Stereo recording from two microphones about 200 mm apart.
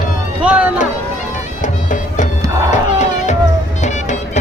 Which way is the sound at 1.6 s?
40° left (ahead or behind).